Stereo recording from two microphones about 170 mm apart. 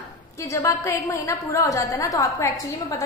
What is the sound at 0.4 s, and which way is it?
A woman's voice, 15° left (ahead or behind).